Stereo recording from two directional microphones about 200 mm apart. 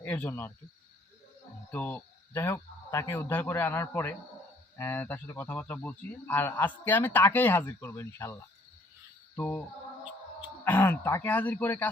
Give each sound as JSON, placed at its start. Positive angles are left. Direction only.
{"t": 0.0, "sound": "a man's voice", "side_deg": 5}
{"t": 1.7, "sound": "a man's voice", "side_deg": 10}
{"t": 9.3, "sound": "a sound", "side_deg": 10}
{"t": 10.6, "sound": "a man's voice", "side_deg": 10}